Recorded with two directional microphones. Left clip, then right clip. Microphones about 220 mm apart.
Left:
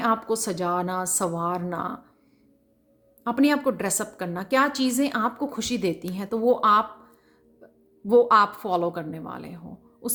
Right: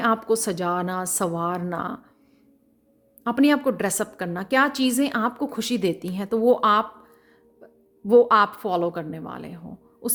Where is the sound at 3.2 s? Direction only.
20° right (ahead or behind).